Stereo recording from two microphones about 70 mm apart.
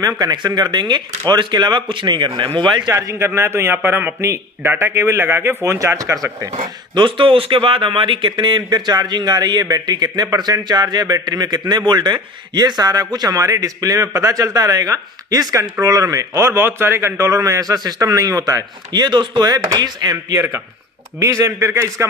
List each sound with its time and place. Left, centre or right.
0.0 s a man's voice: right
2.9 s a man's voice: right
8.3 s a man's voice: right
13.4 s a man's voice: right
18.9 s a man's voice: right
20.3 s a man's voice: right